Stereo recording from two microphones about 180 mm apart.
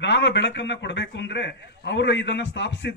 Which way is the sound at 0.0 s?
75° left (ahead or behind).